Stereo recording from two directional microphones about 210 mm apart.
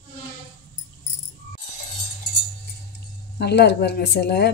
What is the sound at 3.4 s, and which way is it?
Speech, 50° left (ahead or behind).